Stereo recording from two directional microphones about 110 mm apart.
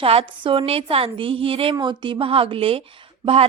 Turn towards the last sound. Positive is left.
turn(degrees=-60)  # may be behind; listen again after turning